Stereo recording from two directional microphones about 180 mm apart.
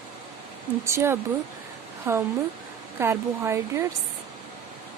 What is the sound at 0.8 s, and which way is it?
Speech, 15° right (ahead or behind).